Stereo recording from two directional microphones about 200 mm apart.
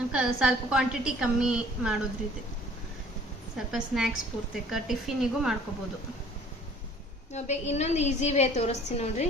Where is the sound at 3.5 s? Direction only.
Centre (ahead or behind).